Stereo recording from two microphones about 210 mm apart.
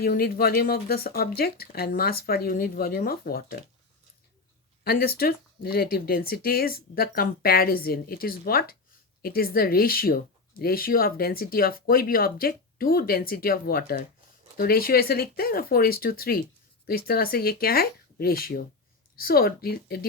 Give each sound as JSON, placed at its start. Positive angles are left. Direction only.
{"t": 0.0, "sound": "speech", "side_deg": 45}
{"t": 4.8, "sound": "speech", "side_deg": 45}